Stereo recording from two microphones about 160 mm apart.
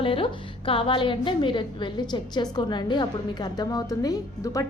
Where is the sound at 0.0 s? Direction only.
35° left (ahead or behind).